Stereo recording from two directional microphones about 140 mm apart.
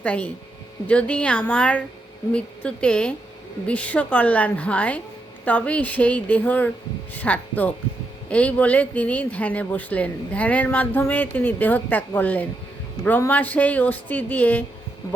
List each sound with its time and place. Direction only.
0.0 s speech: 10° left (ahead or behind)